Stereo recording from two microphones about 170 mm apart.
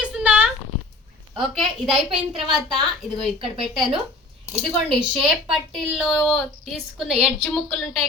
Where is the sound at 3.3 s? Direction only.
30° right (ahead or behind).